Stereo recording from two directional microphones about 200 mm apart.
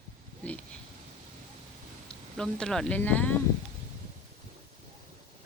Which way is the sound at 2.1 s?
5° left (ahead or behind).